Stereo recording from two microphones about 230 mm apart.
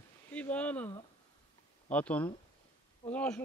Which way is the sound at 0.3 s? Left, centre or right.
Centre.